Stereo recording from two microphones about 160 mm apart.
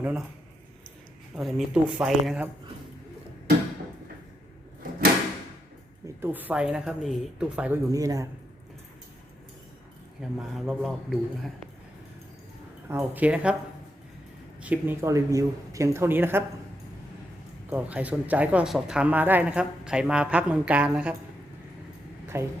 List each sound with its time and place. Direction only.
0.0 s speech: 5° right (ahead or behind)
1.4 s a man's voice: centre (ahead or behind)
6.2 s speech: 10° right (ahead or behind)
7.9 s a man's voice: 20° right (ahead or behind)
10.2 s a man's voice: 5° right (ahead or behind)
12.9 s speech: 10° right (ahead or behind)
14.6 s speech: 10° right (ahead or behind)
17.7 s speech: 10° right (ahead or behind)
22.3 s speech: 15° right (ahead or behind)